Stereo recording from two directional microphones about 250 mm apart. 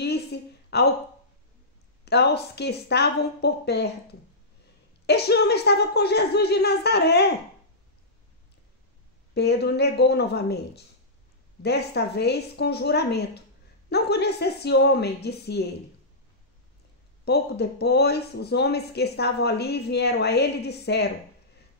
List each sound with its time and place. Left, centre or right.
0.0 s a sound: left
2.0 s speech: left
5.0 s speech: left
9.3 s speech: left
17.2 s speech: left